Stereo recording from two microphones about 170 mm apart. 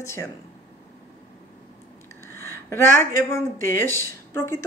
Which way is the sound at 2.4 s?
15° left (ahead or behind).